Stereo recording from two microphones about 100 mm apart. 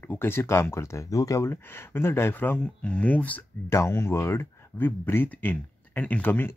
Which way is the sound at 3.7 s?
25° left (ahead or behind).